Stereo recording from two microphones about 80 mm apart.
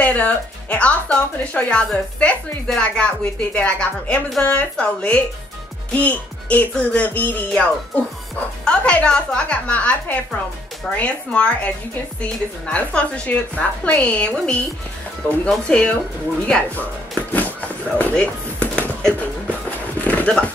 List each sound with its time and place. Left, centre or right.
0.0 s a woman's voice: centre
8.6 s speech: centre
17.3 s a sound: left